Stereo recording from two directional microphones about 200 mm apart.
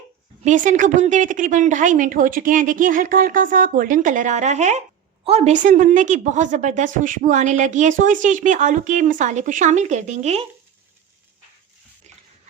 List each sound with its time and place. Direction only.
0.4 s a woman's voice: 40° right (ahead or behind)